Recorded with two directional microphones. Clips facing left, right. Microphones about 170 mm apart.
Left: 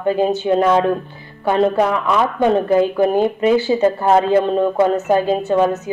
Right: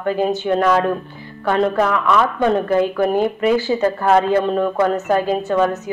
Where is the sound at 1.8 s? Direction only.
30° left (ahead or behind).